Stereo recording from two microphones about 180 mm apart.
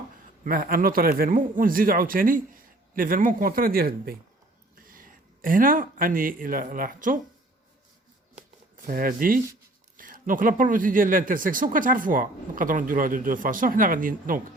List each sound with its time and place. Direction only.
0.4 s speech: 55° right (ahead or behind)
8.7 s speech: 50° right (ahead or behind)